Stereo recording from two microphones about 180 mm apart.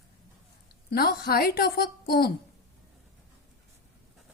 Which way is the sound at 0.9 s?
60° left (ahead or behind).